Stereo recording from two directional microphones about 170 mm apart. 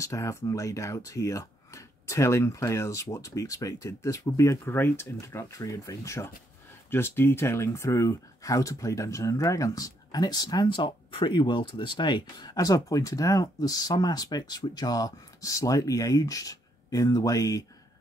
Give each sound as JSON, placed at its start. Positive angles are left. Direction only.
{"t": 0.0, "sound": "speech", "side_deg": 15}